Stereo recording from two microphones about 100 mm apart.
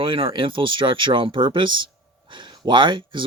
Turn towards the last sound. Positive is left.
turn(degrees=-55)  # may be behind; listen again after turning